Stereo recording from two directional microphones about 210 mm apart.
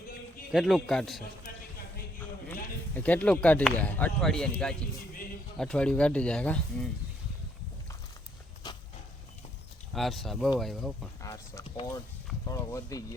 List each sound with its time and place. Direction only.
0.5 s speech: centre (ahead or behind)
2.5 s speech: 5° left (ahead or behind)
9.9 s speech: centre (ahead or behind)
11.2 s speech: 15° left (ahead or behind)